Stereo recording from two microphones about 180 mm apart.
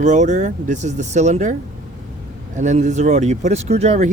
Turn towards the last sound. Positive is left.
turn(degrees=-40)  # may be behind; listen again after turning